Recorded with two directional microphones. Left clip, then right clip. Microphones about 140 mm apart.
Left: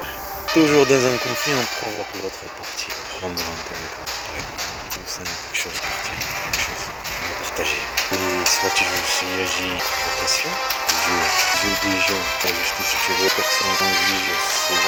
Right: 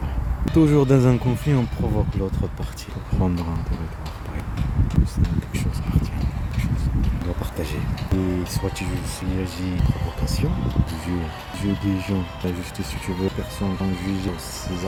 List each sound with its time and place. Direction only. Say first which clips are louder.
0.6 s speech: left 3 dB; 10° right (ahead or behind)
1.1 s speech: left 4 dB; 50° left (ahead or behind)
7.9 s speech: left 2 dB; 45° left (ahead or behind)
10.8 s speech: left 12 dB; 50° left (ahead or behind)
13.1 s speech: left 7 dB; 50° left (ahead or behind)
14.6 s music: left 13 dB; 55° left (ahead or behind)